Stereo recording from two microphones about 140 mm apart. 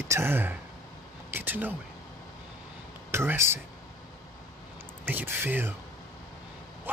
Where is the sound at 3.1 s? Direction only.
15° right (ahead or behind).